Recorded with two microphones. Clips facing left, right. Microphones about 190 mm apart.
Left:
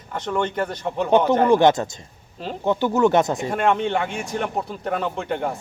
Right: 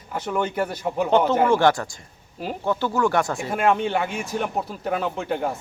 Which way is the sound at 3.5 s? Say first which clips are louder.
Even; 5° right (ahead or behind).